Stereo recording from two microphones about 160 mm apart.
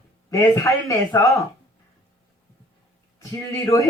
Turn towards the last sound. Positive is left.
turn(degrees=20)  # may be behind; listen again after turning